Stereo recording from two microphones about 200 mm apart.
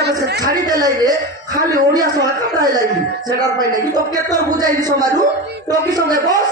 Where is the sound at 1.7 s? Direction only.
20° right (ahead or behind).